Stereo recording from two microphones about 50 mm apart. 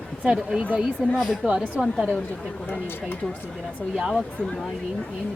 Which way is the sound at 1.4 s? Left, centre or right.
Right.